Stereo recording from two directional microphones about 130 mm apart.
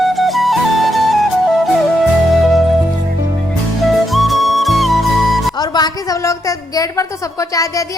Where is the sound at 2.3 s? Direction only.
Centre (ahead or behind).